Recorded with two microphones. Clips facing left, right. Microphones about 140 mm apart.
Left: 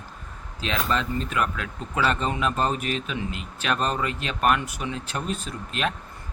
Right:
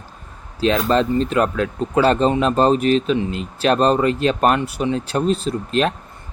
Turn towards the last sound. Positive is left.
turn(degrees=-30)  # may be behind; listen again after turning